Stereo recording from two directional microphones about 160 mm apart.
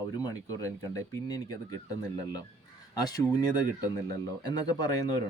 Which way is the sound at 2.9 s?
25° left (ahead or behind).